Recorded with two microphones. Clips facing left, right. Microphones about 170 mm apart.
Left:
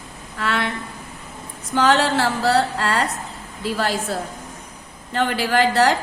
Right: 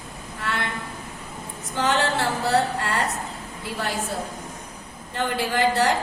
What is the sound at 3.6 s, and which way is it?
Speech, 90° left.